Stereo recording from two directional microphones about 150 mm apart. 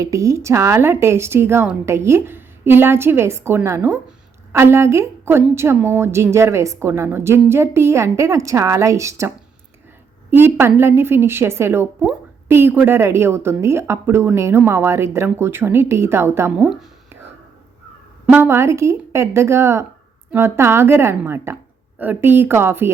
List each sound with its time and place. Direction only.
0.0 s a woman's voice: 20° right (ahead or behind)
10.3 s a woman's voice: 15° right (ahead or behind)
18.3 s a woman's voice: 15° right (ahead or behind)